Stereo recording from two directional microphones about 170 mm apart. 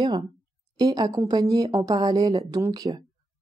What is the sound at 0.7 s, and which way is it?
Speech, 25° right (ahead or behind).